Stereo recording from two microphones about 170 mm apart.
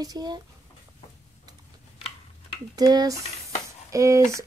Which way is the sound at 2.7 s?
25° right (ahead or behind).